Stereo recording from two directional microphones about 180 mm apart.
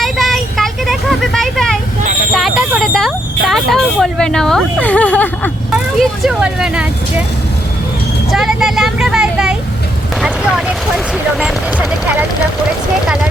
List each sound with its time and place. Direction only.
0.0 s vehicle: centre (ahead or behind)
2.3 s a sound: 5° right (ahead or behind)
3.5 s speech: centre (ahead or behind)
5.7 s speech: 5° right (ahead or behind)
8.3 s speech: centre (ahead or behind)
10.2 s vehicle: 5° right (ahead or behind)
11.1 s speech: 5° right (ahead or behind)